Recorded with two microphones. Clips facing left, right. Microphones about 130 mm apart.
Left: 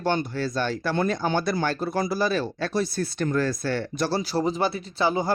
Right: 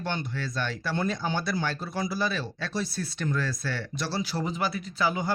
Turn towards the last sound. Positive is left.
turn(degrees=35)  # may be behind; listen again after turning